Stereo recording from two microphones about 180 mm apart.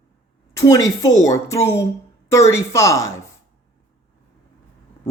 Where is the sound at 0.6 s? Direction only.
20° left (ahead or behind).